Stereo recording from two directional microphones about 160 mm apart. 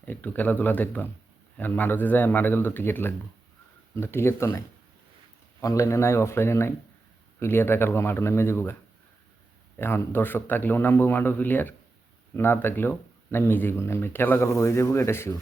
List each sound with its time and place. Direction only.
0.0 s speech: 10° left (ahead or behind)
9.7 s speech: 15° left (ahead or behind)